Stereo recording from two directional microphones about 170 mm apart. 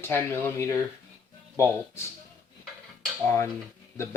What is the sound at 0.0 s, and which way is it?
Speech, 15° left (ahead or behind).